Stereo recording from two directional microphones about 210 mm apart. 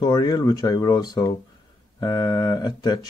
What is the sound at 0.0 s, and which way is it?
Speech, 20° left (ahead or behind).